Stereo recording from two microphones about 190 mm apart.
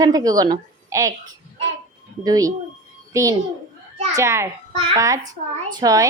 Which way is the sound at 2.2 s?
20° right (ahead or behind).